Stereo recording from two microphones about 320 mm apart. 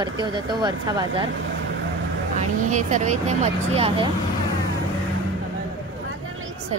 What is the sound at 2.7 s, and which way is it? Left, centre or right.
Speech, right.